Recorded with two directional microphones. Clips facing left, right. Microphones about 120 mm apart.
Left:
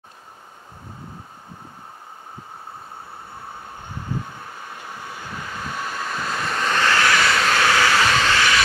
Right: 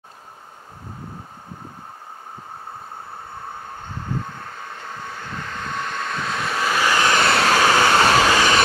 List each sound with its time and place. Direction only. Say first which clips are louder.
4.7 s vehicle: right 1 dB; 10° left (ahead or behind); by 7.1 s 10° right (ahead or behind)
7.1 s vehicle: right 2 dB; 30° right (ahead or behind)
7.8 s train: right 3 dB; 35° right (ahead or behind)